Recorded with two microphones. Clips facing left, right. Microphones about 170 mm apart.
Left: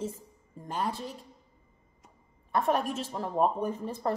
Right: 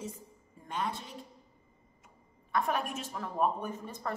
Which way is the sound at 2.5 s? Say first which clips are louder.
Left 4 dB; 35° left (ahead or behind).